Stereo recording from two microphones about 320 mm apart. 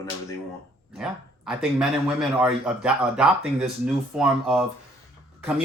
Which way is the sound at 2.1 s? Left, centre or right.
Centre.